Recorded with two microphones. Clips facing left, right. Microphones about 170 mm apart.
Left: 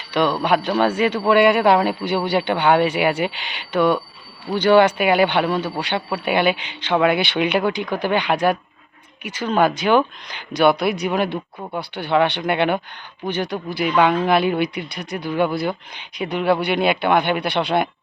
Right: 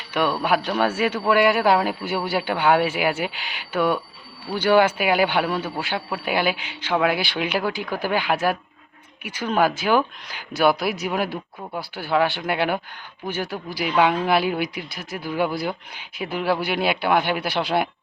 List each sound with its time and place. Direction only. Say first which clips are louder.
0.1 s speech: left 3 dB; 5° right (ahead or behind)